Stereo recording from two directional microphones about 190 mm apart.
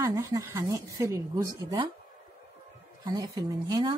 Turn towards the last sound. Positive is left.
turn(degrees=-20)  # may be behind; listen again after turning